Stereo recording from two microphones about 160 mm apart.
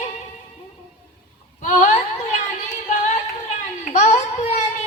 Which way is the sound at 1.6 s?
50° left (ahead or behind).